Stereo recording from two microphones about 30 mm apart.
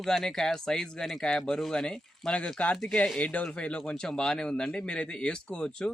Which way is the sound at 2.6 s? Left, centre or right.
Left.